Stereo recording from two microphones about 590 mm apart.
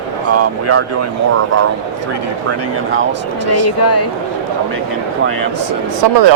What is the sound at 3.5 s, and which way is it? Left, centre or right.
Speech, left.